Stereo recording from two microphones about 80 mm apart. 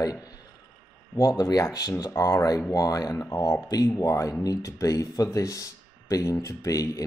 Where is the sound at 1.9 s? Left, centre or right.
Left.